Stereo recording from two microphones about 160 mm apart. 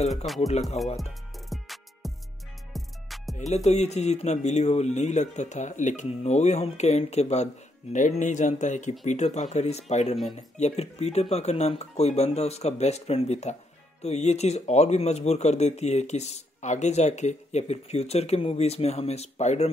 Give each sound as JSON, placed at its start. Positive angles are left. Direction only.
{"t": 0.1, "sound": "speech", "side_deg": 0}
{"t": 1.5, "sound": "music", "side_deg": 0}
{"t": 3.3, "sound": "speech", "side_deg": 45}